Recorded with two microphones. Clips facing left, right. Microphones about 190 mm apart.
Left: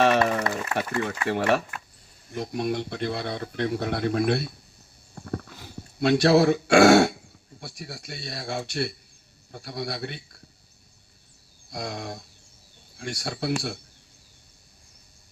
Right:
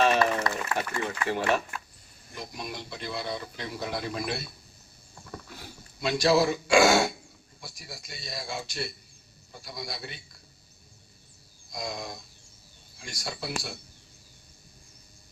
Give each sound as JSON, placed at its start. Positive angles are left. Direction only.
{"t": 0.2, "sound": "a sound", "side_deg": 20}
{"t": 1.3, "sound": "speech", "side_deg": 65}
{"t": 5.1, "sound": "horse", "side_deg": 60}
{"t": 6.0, "sound": "speech", "side_deg": 65}
{"t": 11.7, "sound": "speech", "side_deg": 65}